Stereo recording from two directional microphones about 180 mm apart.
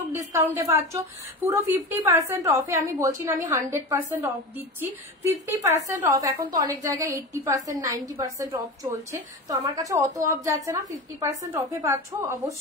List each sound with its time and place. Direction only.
0.1 s a woman's voice: 15° right (ahead or behind)
5.9 s a woman's voice: 15° right (ahead or behind)